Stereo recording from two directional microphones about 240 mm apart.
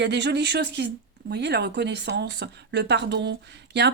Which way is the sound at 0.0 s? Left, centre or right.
Right.